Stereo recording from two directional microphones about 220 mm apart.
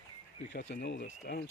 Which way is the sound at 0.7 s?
55° left (ahead or behind).